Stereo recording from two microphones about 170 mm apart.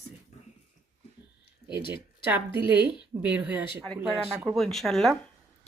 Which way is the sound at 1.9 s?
10° right (ahead or behind).